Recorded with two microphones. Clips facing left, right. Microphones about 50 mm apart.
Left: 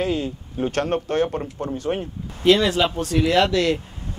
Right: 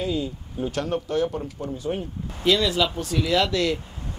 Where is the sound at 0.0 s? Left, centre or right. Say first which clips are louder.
Left 3 dB; left.